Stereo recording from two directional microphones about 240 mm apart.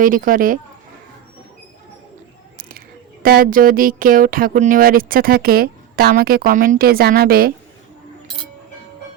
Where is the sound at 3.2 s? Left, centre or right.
Right.